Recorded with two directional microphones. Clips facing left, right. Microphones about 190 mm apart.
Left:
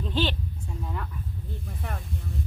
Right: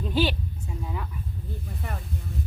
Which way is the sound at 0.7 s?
5° right (ahead or behind).